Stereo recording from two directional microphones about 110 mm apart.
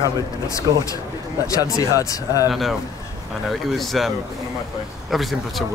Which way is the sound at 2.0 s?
30° left (ahead or behind).